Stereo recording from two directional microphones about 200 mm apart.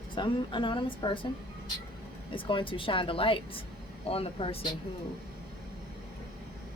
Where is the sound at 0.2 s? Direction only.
25° left (ahead or behind).